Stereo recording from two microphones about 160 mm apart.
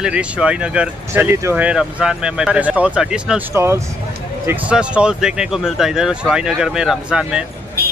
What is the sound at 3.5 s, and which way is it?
Speech, 15° right (ahead or behind).